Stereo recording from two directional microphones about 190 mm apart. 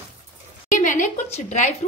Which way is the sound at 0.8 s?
40° left (ahead or behind).